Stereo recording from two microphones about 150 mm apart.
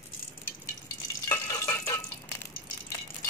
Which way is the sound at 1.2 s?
20° left (ahead or behind).